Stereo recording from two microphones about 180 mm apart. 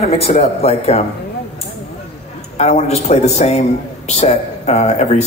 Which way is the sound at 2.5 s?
35° left (ahead or behind).